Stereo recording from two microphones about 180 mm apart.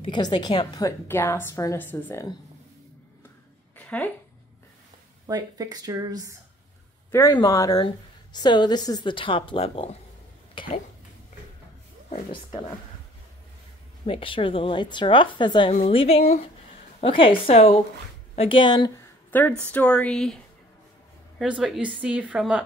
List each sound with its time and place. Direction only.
0.0 s a woman's voice: 25° left (ahead or behind); by 2.2 s 10° left (ahead or behind)
3.7 s a sound: 10° left (ahead or behind)
5.2 s speech: 20° right (ahead or behind)
7.1 s a woman's voice: 15° left (ahead or behind); by 9.8 s 30° left (ahead or behind)
10.5 s a sound: 30° left (ahead or behind)
12.1 s a woman's voice: 30° left (ahead or behind)
14.0 s a woman's voice: 30° left (ahead or behind)
19.6 s a woman's voice: 5° left (ahead or behind)
21.4 s speech: centre (ahead or behind)